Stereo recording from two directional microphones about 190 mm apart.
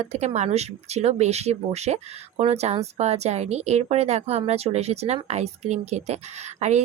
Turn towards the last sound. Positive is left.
turn(degrees=-35)  # may be behind; listen again after turning